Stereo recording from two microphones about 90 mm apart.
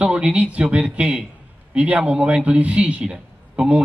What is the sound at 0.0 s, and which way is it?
A man's voice, 15° right (ahead or behind).